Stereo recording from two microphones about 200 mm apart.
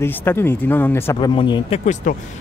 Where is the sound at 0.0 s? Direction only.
10° left (ahead or behind).